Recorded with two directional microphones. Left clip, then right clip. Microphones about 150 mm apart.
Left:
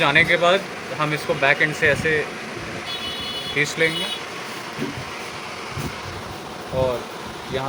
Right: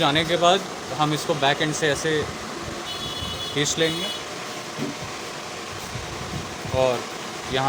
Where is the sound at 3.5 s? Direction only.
45° right (ahead or behind).